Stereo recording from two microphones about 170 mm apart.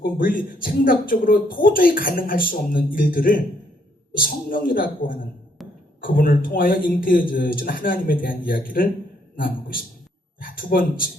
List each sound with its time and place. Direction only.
0.0 s a man's voice: 55° left (ahead or behind)